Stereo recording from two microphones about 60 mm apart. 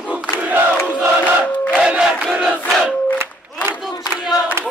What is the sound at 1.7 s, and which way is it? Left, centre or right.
Battle cry, centre.